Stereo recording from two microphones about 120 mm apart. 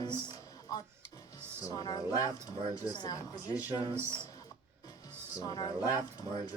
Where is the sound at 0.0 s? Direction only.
35° left (ahead or behind).